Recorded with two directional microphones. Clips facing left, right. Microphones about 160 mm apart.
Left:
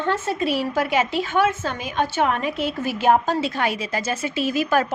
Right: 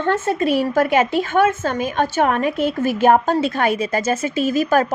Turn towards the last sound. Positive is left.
turn(degrees=-45)  # may be behind; listen again after turning